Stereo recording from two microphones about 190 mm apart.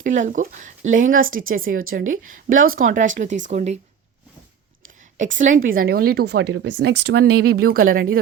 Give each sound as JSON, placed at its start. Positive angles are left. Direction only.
{"t": 0.0, "sound": "speech", "side_deg": -40}
{"t": 5.1, "sound": "speech", "side_deg": -40}